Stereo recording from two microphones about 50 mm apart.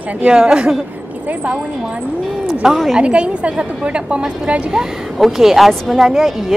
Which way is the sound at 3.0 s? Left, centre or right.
Right.